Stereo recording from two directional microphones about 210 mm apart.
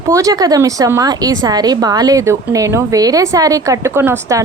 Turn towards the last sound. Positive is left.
turn(degrees=-10)  # may be behind; listen again after turning